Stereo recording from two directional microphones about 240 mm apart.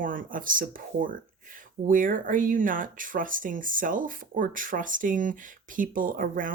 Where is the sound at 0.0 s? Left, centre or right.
Right.